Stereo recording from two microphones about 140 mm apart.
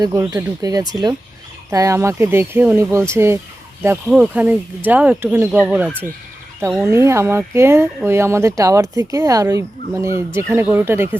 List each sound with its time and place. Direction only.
0.0 s speech: 25° right (ahead or behind)
6.8 s speech: 20° right (ahead or behind)